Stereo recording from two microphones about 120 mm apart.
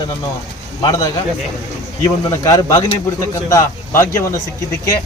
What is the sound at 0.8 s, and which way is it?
Speech, 30° left (ahead or behind).